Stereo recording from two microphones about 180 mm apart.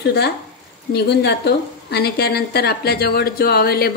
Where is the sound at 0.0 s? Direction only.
65° left (ahead or behind).